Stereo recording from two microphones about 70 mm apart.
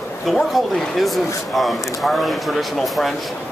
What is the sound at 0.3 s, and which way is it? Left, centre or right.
Speech, centre.